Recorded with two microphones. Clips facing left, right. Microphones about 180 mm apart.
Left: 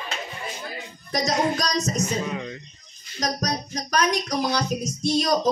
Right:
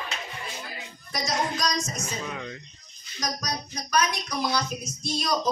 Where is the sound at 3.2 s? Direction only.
40° left (ahead or behind).